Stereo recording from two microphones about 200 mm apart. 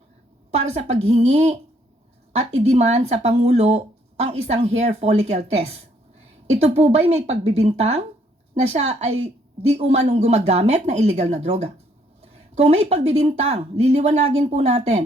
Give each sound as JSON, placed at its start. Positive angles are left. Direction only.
{"t": 0.5, "sound": "speech", "side_deg": -35}
{"t": 12.2, "sound": "a sound", "side_deg": -30}
{"t": 13.1, "sound": "speech", "side_deg": -35}